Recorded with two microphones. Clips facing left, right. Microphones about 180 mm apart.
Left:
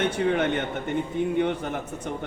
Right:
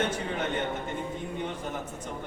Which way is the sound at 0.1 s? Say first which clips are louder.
Left 8 dB; 65° left (ahead or behind).